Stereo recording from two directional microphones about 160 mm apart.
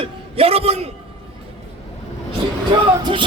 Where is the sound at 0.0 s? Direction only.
35° right (ahead or behind).